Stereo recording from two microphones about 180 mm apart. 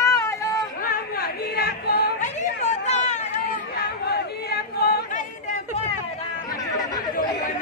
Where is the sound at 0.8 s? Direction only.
55° left (ahead or behind).